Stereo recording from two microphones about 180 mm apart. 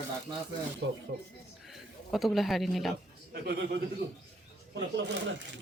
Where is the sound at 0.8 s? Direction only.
90° right.